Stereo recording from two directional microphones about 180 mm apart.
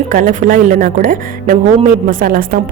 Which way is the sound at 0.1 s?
45° right (ahead or behind).